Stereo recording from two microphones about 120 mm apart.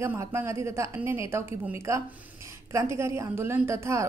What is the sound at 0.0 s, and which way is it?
A woman's voice, 20° right (ahead or behind).